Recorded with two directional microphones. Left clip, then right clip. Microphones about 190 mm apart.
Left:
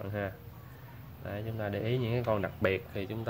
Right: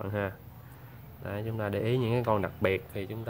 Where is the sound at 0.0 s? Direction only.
20° right (ahead or behind).